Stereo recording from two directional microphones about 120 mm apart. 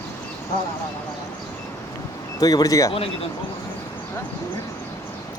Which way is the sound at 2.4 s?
30° left (ahead or behind).